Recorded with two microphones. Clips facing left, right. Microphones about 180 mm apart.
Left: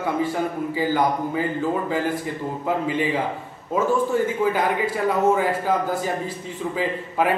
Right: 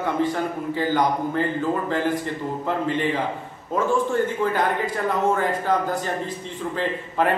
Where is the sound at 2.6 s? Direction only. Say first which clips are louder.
Left 1 dB; 5° left (ahead or behind).